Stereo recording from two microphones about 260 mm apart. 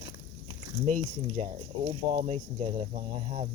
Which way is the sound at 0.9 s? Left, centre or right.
Right.